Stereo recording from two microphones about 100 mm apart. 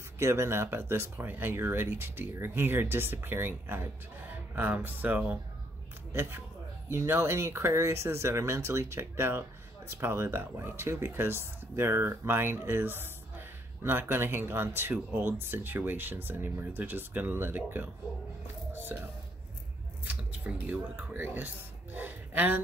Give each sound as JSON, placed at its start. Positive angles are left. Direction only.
{"t": 0.2, "sound": "speech", "side_deg": -25}
{"t": 6.9, "sound": "speech", "side_deg": -25}
{"t": 20.1, "sound": "speech", "side_deg": -15}